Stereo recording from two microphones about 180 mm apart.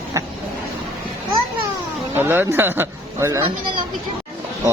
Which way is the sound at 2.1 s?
10° right (ahead or behind).